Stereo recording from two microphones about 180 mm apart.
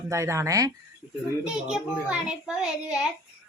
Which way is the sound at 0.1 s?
15° right (ahead or behind).